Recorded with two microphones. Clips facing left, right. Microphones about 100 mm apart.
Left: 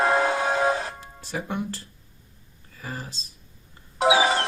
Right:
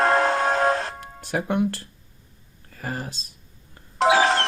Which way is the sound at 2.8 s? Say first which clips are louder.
Right 5 dB; 55° right (ahead or behind).